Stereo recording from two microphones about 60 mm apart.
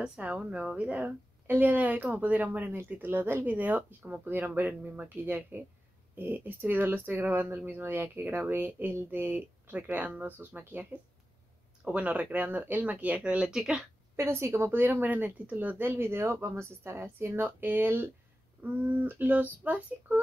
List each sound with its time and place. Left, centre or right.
0.0 s a woman's voice: centre
11.8 s a woman's voice: right
14.1 s speech: right
15.8 s speech: right
17.4 s a woman's voice: right